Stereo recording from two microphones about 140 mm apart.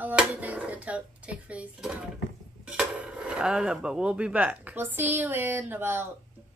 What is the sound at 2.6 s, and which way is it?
Cutlery, 10° right (ahead or behind).